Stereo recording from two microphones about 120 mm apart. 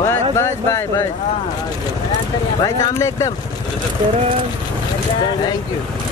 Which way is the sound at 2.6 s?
25° left (ahead or behind).